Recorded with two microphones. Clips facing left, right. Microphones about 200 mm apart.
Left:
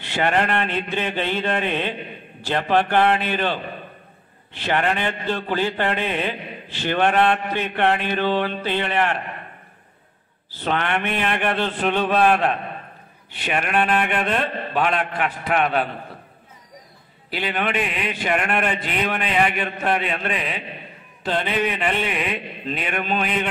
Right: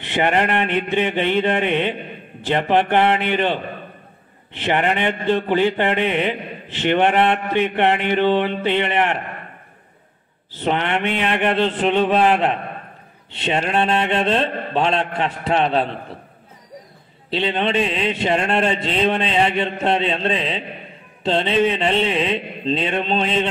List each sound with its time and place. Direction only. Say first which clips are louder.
0.0 s speech: right 2 dB; 20° right (ahead or behind)
4.5 s speech: right 2 dB; 20° right (ahead or behind)
10.5 s speech: right 3 dB; 20° right (ahead or behind)
17.3 s speech: right 4 dB; 25° right (ahead or behind)